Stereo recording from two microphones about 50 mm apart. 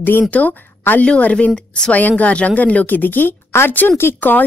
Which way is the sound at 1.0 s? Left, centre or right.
Left.